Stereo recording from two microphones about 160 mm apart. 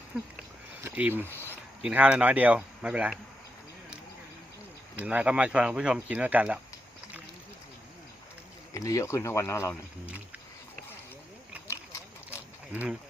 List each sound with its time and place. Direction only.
0.8 s speech: 10° right (ahead or behind)
1.2 s speech: 15° left (ahead or behind)
1.8 s speech: 10° right (ahead or behind)
4.9 s speech: 10° right (ahead or behind)
8.7 s speech: 20° left (ahead or behind)
10.1 s speech: 10° right (ahead or behind)
11.7 s a sound: 15° left (ahead or behind)
12.7 s speech: 10° right (ahead or behind)